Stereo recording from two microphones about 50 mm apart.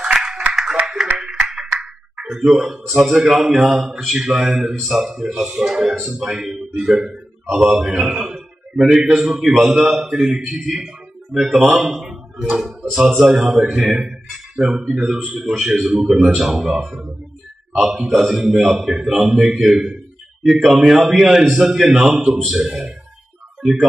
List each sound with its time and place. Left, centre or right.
0.0 s a sound: centre
1.2 s music: centre
1.7 s ping: centre
2.3 s a man's voice: centre
3.3 s a man's voice: centre
9.2 s a man's voice: centre
11.3 s a man's voice: centre
11.8 s a sound: centre
12.5 s a man's voice: centre
14.0 s a sound: centre
14.9 s a man's voice: centre